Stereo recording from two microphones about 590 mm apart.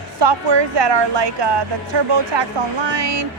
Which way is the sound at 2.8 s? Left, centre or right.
Right.